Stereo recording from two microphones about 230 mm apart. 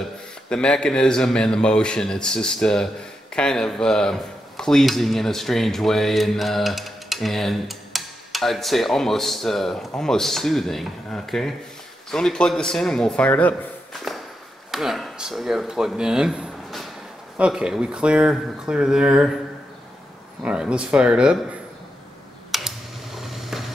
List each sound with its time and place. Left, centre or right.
0.5 s a man's voice: centre
20.4 s speech: centre
22.5 s a sound: centre